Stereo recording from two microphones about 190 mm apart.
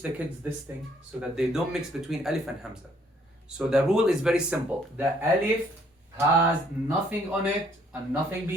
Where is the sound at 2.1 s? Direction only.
Centre (ahead or behind).